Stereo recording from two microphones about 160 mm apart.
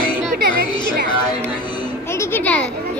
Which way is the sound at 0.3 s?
75° right (ahead or behind).